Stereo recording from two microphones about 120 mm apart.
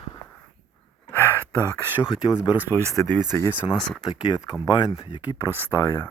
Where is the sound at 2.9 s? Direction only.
15° left (ahead or behind).